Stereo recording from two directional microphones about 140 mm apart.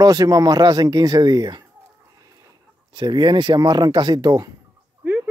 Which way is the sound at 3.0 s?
30° right (ahead or behind).